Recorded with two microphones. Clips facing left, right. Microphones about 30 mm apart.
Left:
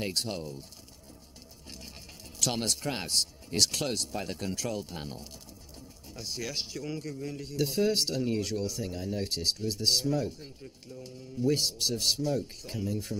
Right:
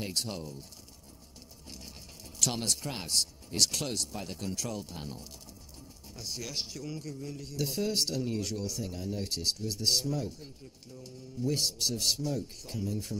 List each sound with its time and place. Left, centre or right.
0.0 s speech: left
2.3 s a sound: centre
2.8 s a man's voice: left